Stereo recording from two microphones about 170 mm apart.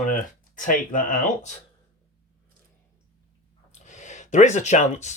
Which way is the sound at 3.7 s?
45° left (ahead or behind).